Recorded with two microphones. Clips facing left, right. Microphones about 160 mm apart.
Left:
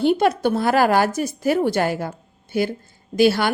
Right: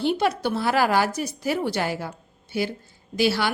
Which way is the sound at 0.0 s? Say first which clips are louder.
Left 5 dB; 50° left (ahead or behind).